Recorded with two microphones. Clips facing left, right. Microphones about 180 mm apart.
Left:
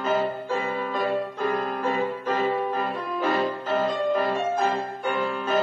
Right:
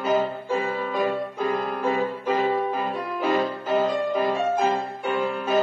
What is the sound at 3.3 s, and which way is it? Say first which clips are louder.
Music: right 2 dB; 10° right (ahead or behind).